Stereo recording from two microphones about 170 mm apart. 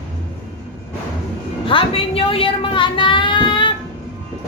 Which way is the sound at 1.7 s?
30° left (ahead or behind).